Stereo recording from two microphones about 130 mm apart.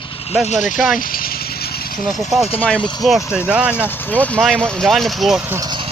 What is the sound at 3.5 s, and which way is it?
Speech, 10° right (ahead or behind).